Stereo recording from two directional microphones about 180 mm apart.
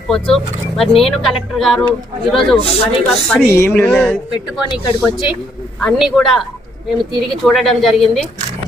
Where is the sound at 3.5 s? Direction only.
15° left (ahead or behind).